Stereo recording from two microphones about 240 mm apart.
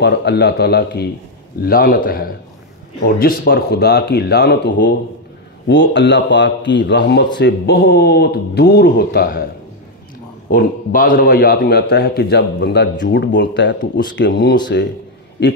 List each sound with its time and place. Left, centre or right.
0.0 s a man's voice: left
10.5 s a man's voice: left